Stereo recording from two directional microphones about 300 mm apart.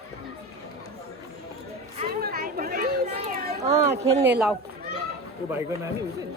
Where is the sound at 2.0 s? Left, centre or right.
Right.